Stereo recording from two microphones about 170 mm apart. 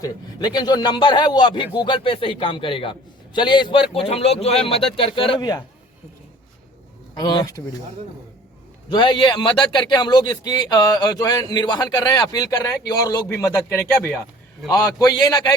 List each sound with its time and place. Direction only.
0.0 s speech: 25° left (ahead or behind)
7.1 s speech: 25° left (ahead or behind)
8.9 s a man's voice: 30° left (ahead or behind)